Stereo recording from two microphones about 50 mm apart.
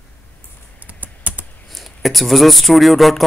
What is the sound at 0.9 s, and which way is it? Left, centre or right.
Typing, right.